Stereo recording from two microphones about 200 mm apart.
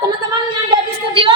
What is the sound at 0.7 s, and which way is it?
Speech, 25° right (ahead or behind).